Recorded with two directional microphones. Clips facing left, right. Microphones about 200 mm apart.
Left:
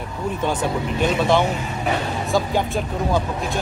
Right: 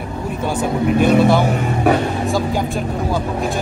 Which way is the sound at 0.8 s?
60° right (ahead or behind).